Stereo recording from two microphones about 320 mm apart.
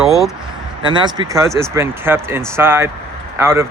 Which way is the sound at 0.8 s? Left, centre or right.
Centre.